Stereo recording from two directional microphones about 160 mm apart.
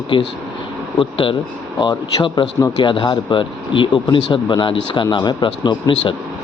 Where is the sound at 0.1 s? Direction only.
30° left (ahead or behind).